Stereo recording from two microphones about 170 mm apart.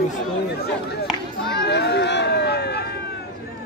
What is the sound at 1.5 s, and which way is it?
Run, 70° left (ahead or behind).